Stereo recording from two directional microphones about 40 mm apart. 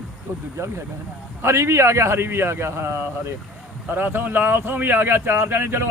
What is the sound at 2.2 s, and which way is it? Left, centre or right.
A man's voice, right.